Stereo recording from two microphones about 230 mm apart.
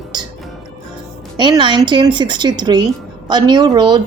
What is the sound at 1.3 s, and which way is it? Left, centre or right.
Speech, centre.